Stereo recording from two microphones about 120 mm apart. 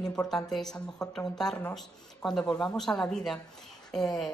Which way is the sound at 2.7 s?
5° left (ahead or behind).